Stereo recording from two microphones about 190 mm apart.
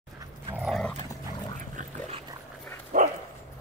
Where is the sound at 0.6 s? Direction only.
Centre (ahead or behind).